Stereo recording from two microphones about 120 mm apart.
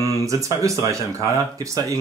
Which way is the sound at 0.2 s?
25° right (ahead or behind).